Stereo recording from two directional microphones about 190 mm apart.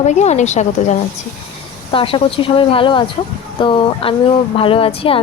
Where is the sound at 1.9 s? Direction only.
30° left (ahead or behind).